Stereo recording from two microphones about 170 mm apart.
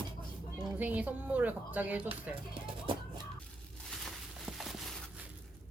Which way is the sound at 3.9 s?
Centre (ahead or behind).